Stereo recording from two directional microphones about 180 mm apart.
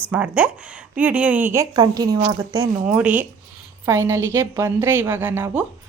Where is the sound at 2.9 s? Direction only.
5° right (ahead or behind).